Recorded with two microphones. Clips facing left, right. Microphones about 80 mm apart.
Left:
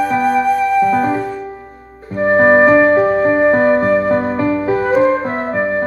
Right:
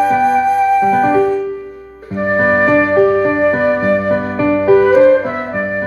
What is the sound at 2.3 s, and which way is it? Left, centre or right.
Music, left.